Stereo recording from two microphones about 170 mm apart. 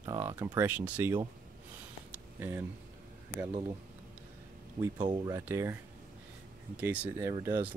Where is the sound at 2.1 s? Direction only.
15° right (ahead or behind).